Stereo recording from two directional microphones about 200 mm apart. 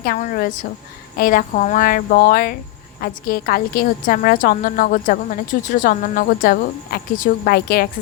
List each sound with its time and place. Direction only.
0.0 s a woman's voice: 45° left (ahead or behind)